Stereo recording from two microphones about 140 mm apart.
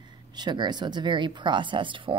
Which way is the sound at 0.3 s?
30° right (ahead or behind).